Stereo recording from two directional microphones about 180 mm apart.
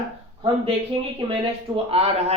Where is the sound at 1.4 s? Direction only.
35° right (ahead or behind).